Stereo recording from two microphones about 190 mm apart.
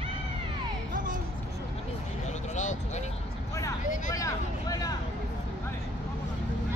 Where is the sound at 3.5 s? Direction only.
15° left (ahead or behind).